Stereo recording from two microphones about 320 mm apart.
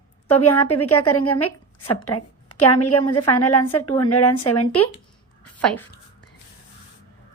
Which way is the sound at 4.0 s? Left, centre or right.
Left.